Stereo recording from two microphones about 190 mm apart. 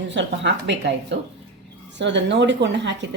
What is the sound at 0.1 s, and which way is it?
Speech, 70° right (ahead or behind).